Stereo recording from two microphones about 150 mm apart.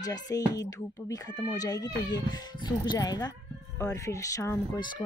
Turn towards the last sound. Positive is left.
turn(degrees=20)  # may be behind; listen again after turning